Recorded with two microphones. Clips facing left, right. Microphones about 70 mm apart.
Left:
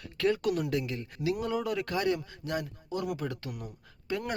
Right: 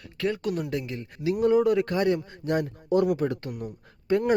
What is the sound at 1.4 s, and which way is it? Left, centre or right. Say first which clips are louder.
Speech: right 10 dB; right.